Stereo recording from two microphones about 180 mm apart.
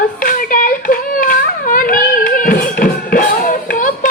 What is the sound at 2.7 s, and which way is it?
Music, 50° left (ahead or behind).